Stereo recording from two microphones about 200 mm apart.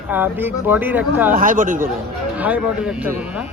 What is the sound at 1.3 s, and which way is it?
Speech, 40° right (ahead or behind).